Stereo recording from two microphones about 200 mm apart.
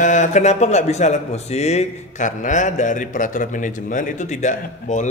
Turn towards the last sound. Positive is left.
turn(degrees=35)  # may be behind; listen again after turning